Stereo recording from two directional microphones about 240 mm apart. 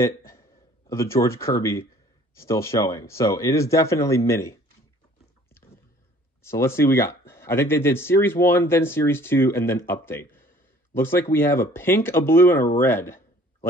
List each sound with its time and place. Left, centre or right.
0.0 s speech: centre
6.4 s speech: centre
12.7 s a sound: centre